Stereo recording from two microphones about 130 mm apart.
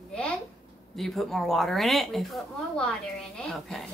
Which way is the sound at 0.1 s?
5° left (ahead or behind).